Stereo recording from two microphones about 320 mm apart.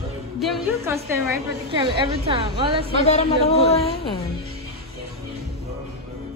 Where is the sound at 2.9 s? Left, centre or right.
Centre.